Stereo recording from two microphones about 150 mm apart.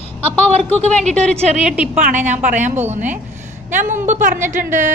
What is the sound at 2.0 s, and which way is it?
A woman's voice, 55° right (ahead or behind).